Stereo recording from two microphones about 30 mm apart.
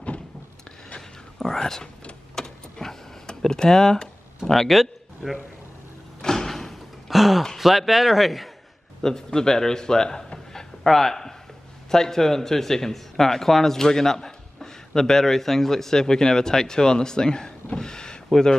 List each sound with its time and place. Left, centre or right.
1.4 s speech: centre
2.3 s vehicle: centre
3.3 s speech: left
4.5 s a man's voice: centre
6.2 s door: centre
7.1 s speech: centre
9.0 s speech: left
17.7 s a sound: left